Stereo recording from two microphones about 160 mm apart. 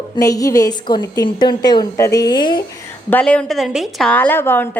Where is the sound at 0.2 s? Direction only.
20° left (ahead or behind).